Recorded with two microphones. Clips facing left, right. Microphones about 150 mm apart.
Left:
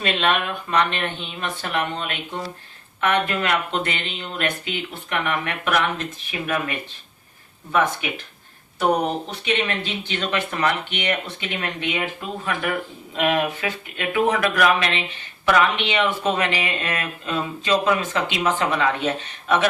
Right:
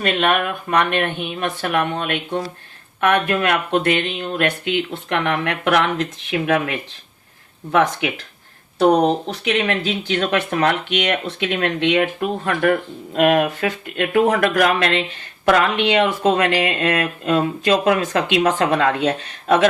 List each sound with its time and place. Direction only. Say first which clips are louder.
0.0 s speech: right 3 dB; 50° right (ahead or behind); by 8.1 s 70° right (ahead or behind)
9.2 s speech: right 4 dB; 85° right; by 19.6 s 60° right (ahead or behind)